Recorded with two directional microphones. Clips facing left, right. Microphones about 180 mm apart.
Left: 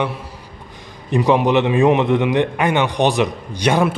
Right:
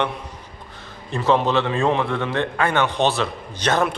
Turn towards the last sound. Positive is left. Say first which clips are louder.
# left 4 dB
turn(degrees=10)  # may be behind; listen again after turning